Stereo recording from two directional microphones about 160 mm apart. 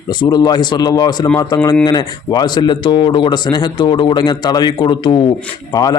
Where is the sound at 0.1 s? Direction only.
25° left (ahead or behind).